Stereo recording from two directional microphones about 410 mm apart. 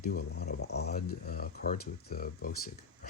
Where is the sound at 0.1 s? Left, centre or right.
Left.